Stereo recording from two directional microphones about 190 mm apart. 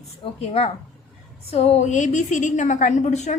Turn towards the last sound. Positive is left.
turn(degrees=35)  # may be behind; listen again after turning